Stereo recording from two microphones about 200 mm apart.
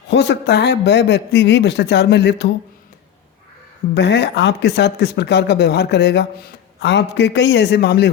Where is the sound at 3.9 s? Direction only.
60° left (ahead or behind).